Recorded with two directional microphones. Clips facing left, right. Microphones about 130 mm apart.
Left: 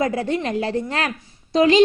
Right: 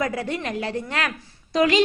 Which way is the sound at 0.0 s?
30° left (ahead or behind).